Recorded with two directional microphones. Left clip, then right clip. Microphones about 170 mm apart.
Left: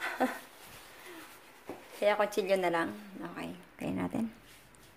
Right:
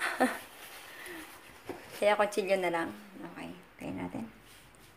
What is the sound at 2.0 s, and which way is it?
Speech, 10° right (ahead or behind).